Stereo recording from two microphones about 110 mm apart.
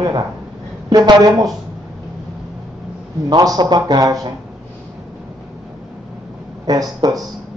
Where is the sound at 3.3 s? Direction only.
35° right (ahead or behind).